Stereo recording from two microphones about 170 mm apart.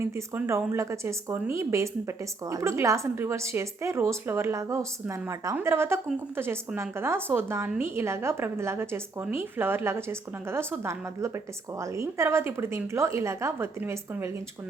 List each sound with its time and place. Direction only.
0.0 s speech: 15° right (ahead or behind)